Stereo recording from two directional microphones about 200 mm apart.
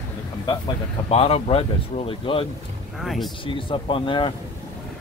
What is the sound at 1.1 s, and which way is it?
Speech, 30° left (ahead or behind).